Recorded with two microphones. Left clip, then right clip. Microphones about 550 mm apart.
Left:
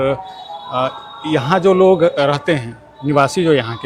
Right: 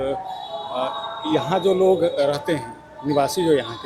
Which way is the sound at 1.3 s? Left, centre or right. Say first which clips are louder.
Left 6 dB; left.